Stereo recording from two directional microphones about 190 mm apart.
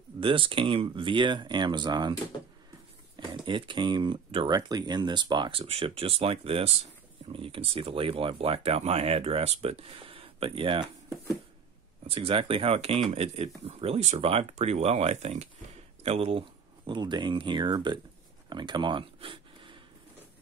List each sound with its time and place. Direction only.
0.2 s speech: 25° right (ahead or behind)
3.4 s speech: 25° right (ahead or behind)
18.5 s a sound: 25° right (ahead or behind)